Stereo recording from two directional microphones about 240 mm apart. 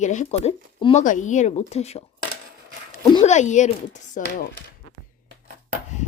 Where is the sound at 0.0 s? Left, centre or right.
Left.